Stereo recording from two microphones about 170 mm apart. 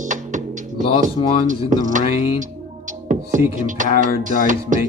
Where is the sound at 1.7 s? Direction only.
50° right (ahead or behind).